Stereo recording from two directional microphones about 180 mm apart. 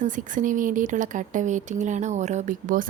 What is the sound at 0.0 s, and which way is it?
A woman's voice, 45° right (ahead or behind).